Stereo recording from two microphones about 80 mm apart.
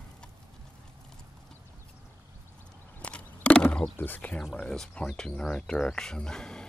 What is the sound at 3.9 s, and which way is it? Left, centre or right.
Speech, left.